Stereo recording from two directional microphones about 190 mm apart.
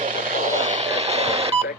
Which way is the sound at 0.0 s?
45° right (ahead or behind).